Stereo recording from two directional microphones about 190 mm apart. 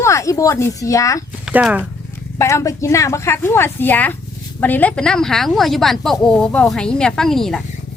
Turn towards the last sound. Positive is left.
turn(degrees=0)  # may be behind; listen again after turning